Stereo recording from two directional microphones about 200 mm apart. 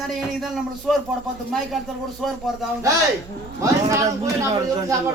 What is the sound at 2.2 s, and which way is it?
Speech, centre (ahead or behind).